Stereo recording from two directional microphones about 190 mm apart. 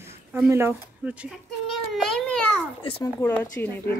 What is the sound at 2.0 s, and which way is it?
Babbling, 5° left (ahead or behind).